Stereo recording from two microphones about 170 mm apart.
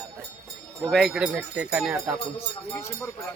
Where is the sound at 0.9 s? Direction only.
Centre (ahead or behind).